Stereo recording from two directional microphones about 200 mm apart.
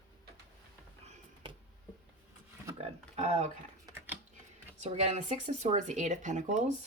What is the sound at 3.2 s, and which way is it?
Speech, 35° right (ahead or behind).